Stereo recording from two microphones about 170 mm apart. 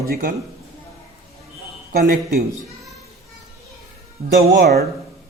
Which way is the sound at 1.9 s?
60° right (ahead or behind).